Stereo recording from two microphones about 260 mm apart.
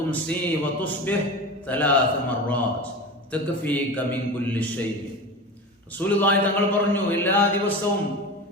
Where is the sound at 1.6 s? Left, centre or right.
Centre.